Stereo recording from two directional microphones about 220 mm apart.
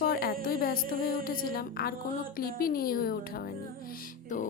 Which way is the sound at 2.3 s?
40° left (ahead or behind).